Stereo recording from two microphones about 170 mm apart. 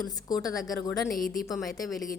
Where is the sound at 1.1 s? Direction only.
55° left (ahead or behind).